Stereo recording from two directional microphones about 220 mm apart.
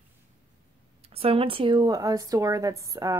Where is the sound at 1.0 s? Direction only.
25° right (ahead or behind).